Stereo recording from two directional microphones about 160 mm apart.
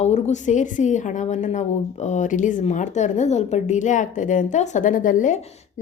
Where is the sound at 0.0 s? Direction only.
45° left (ahead or behind).